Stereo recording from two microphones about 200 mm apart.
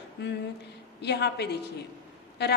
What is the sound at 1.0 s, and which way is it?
Speech, 55° left (ahead or behind).